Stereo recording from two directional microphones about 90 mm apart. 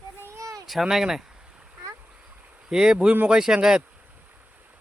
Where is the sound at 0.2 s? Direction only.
30° right (ahead or behind).